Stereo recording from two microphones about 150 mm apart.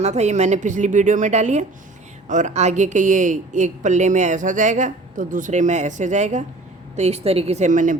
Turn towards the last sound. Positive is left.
turn(degrees=-60)  # may be behind; listen again after turning